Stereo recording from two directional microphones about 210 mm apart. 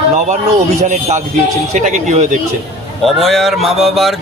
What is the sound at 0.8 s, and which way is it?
Speech, 35° right (ahead or behind).